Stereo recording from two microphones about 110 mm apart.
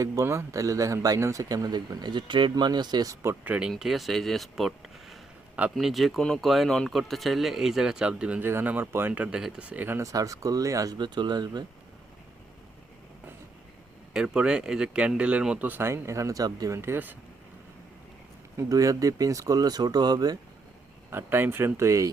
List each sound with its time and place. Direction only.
0.0 s speech: 25° right (ahead or behind)
3.4 s speech: 10° right (ahead or behind)
3.7 s speech: centre (ahead or behind)
10.0 s speech: 30° right (ahead or behind)
14.1 s speech: 5° right (ahead or behind)
18.5 s speech: 30° right (ahead or behind)
21.1 s speech: 20° right (ahead or behind)